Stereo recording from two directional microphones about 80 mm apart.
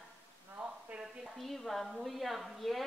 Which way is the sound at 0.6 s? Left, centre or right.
Centre.